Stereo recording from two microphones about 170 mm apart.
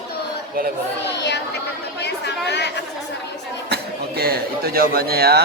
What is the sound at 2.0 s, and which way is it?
Chatter, 80° left.